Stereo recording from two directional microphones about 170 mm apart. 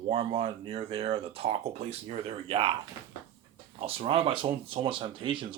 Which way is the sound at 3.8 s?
35° right (ahead or behind).